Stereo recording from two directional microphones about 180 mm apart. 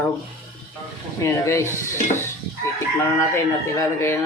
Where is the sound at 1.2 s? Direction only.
15° left (ahead or behind).